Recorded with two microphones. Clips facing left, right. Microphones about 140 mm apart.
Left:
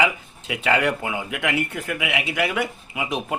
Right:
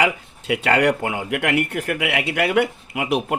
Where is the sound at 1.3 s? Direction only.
65° right (ahead or behind).